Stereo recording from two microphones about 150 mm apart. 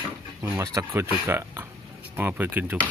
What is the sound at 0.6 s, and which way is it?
Speech, 20° right (ahead or behind).